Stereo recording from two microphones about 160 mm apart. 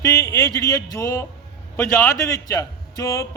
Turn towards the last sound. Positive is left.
turn(degrees=20)  # may be behind; listen again after turning